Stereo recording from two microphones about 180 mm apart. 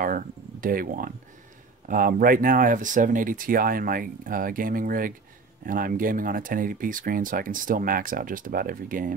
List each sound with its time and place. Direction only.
0.0 s speech: 50° right (ahead or behind)